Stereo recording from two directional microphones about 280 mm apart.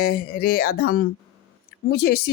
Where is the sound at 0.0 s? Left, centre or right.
Left.